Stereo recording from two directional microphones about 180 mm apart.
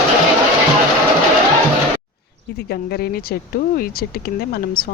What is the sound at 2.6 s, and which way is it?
Speech, 60° left (ahead or behind).